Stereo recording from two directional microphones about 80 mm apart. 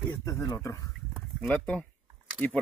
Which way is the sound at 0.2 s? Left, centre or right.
Left.